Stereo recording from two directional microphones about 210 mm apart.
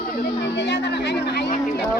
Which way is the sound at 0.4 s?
55° left (ahead or behind).